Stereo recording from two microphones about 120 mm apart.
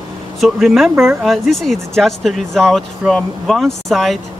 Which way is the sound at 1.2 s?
Centre (ahead or behind).